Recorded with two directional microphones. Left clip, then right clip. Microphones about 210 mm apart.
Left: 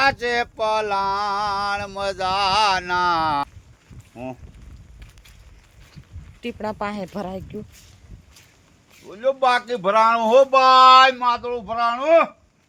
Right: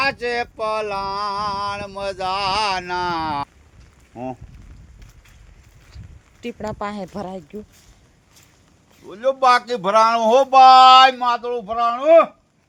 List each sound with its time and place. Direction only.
0.0 s a sound: 30° left (ahead or behind)
4.1 s speech: 25° right (ahead or behind)
6.4 s speech: 5° left (ahead or behind)
9.0 s speech: 35° right (ahead or behind)